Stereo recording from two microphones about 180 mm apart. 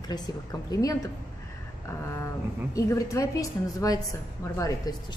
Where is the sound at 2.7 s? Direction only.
20° left (ahead or behind).